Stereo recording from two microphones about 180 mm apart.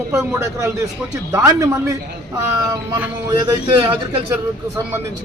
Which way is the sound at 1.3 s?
15° right (ahead or behind).